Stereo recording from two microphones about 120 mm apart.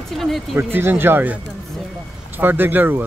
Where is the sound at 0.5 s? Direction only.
20° right (ahead or behind).